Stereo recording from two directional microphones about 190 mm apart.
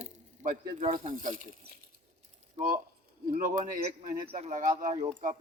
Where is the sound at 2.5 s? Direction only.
45° right (ahead or behind).